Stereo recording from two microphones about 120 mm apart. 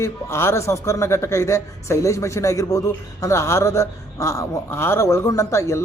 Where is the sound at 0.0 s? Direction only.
20° left (ahead or behind).